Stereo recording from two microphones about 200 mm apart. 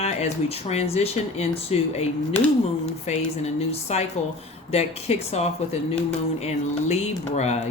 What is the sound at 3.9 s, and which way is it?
Speech, 35° left (ahead or behind).